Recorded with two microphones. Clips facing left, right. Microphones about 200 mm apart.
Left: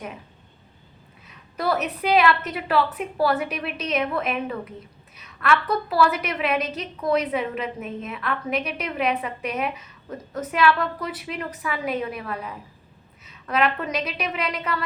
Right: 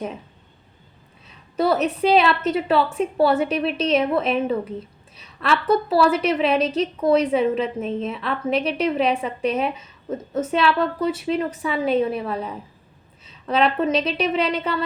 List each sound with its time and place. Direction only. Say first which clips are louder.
1.3 s a woman's voice: right 5 dB; 25° right (ahead or behind)